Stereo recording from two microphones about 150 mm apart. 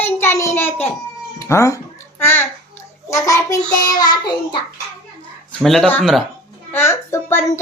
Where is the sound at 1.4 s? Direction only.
20° left (ahead or behind).